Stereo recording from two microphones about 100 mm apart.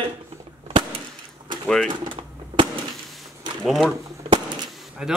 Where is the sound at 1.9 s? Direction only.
50° right (ahead or behind).